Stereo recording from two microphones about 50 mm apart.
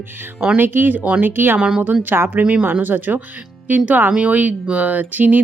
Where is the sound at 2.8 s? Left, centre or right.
Right.